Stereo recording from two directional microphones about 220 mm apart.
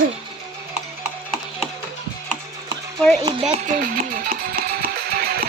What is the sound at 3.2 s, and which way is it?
Speech, 20° right (ahead or behind).